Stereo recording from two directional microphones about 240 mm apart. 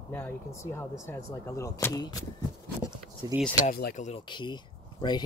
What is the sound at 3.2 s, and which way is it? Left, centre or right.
Speech, centre.